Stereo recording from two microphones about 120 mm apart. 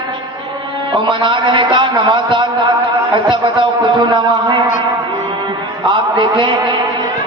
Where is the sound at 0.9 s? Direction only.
45° right (ahead or behind).